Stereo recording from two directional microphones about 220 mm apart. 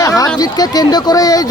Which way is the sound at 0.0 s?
15° left (ahead or behind).